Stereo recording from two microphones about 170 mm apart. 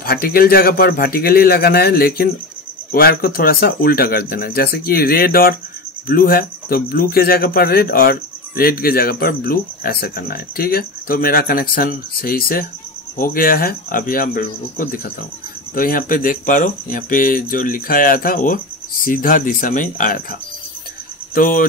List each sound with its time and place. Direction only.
0.0 s speech: 60° left (ahead or behind)
21.4 s speech: 55° left (ahead or behind)